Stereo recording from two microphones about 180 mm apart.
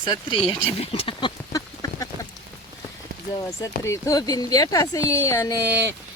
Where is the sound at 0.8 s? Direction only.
30° left (ahead or behind).